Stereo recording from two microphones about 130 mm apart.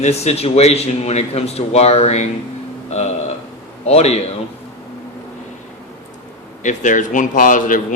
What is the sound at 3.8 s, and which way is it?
Speech, 55° left (ahead or behind).